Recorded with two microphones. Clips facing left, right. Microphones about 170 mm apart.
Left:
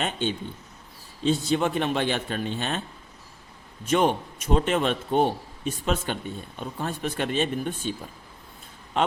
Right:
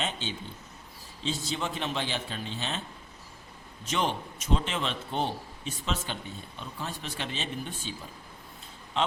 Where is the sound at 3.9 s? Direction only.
55° left (ahead or behind).